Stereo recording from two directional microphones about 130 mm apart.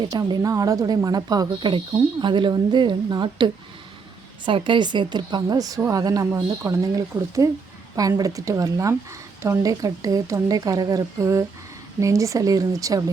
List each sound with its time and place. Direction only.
0.1 s a woman's voice: 30° right (ahead or behind)